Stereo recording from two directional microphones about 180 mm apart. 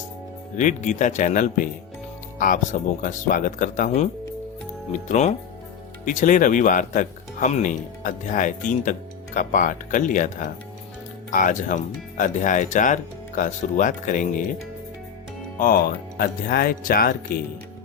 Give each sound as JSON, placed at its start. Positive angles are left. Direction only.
{"t": 0.5, "sound": "speech", "side_deg": 45}
{"t": 3.0, "sound": "speech", "side_deg": 45}
{"t": 15.5, "sound": "speech", "side_deg": 55}